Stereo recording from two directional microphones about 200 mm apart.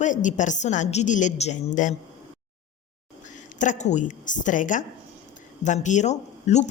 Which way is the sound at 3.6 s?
35° left (ahead or behind).